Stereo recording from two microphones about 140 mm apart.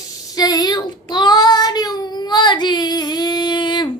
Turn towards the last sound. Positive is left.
turn(degrees=35)  # may be behind; listen again after turning